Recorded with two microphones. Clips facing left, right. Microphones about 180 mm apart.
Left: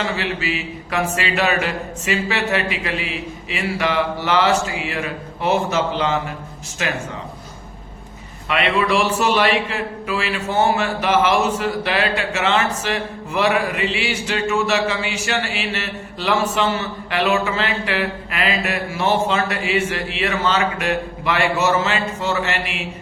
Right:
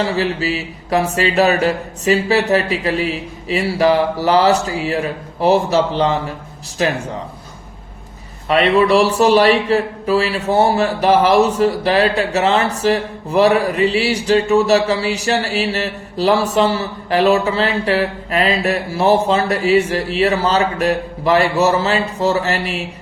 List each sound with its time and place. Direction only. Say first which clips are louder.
0.0 s a man's voice: right 5 dB; 35° right (ahead or behind)
8.4 s a man's voice: right 6 dB; 35° right (ahead or behind)